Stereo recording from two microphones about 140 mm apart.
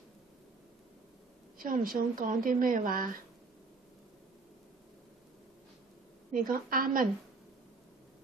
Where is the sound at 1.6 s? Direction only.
80° right.